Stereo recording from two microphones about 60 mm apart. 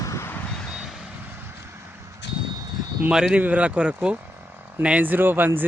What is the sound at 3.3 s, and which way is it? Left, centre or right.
Speech, right.